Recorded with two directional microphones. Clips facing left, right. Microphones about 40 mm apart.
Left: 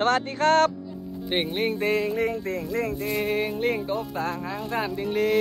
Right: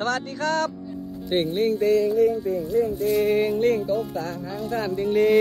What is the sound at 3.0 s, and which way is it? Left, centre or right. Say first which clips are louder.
Music: right 6 dB; centre.